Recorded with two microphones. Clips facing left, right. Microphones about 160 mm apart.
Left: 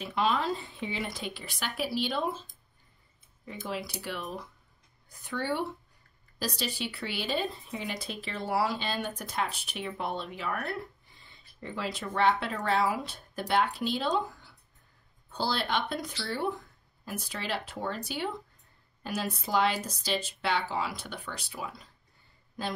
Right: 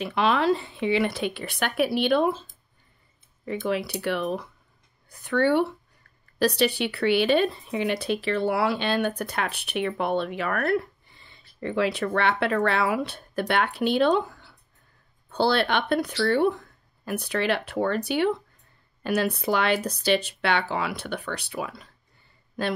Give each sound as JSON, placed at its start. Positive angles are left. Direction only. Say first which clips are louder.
{"t": 0.0, "sound": "speech", "louder": "right 6 dB", "side_deg": -70}